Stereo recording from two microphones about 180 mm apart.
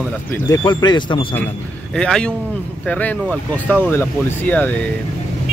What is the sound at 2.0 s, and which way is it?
Speech, 5° left (ahead or behind).